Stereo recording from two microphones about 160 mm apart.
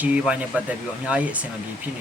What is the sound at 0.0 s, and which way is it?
Speech, 10° right (ahead or behind).